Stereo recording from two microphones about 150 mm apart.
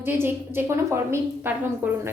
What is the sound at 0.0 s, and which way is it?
A woman's voice, 15° right (ahead or behind).